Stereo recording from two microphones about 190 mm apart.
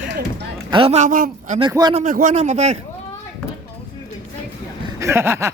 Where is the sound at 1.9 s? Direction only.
40° right (ahead or behind).